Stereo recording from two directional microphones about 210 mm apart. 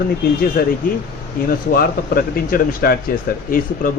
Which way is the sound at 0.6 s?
45° left (ahead or behind).